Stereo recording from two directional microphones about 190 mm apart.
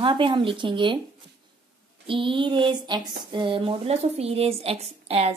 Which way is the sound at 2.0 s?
25° right (ahead or behind).